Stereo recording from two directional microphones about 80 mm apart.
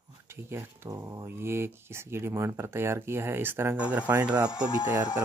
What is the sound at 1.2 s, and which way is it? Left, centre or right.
Speech, right.